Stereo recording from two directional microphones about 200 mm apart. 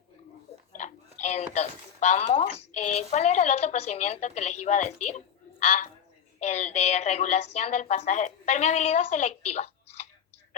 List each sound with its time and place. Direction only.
0.8 s a woman's voice: 35° left (ahead or behind)